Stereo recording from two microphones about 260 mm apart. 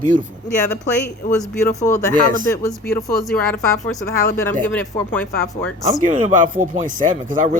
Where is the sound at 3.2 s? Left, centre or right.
Centre.